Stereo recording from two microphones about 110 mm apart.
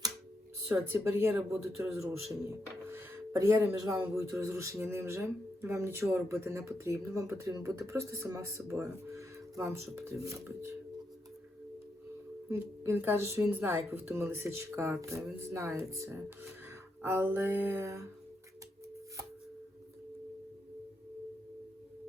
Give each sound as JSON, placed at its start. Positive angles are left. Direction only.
{"t": 0.7, "sound": "speech", "side_deg": -20}
{"t": 3.4, "sound": "speech", "side_deg": -25}
{"t": 12.5, "sound": "speech", "side_deg": -25}